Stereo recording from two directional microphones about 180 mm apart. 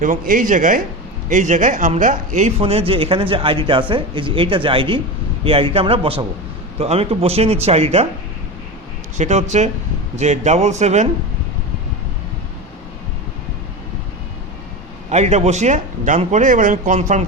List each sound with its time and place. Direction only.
0.0 s speech: 45° right (ahead or behind)
9.1 s speech: 40° right (ahead or behind)
15.1 s speech: 40° right (ahead or behind)